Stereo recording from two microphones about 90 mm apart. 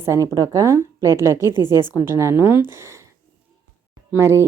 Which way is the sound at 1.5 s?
50° left (ahead or behind).